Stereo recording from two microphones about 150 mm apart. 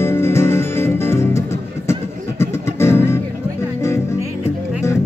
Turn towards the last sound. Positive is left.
turn(degrees=15)  # may be behind; listen again after turning